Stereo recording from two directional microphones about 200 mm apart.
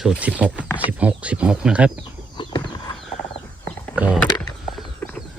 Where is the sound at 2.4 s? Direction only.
25° left (ahead or behind).